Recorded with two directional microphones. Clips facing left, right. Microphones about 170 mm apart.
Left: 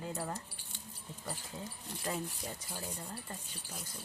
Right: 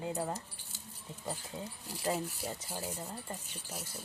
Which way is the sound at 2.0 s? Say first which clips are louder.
Right 4 dB; 30° right (ahead or behind).